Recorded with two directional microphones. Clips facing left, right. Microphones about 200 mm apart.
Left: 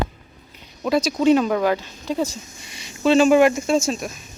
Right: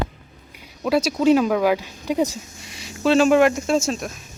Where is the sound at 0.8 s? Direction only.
5° right (ahead or behind).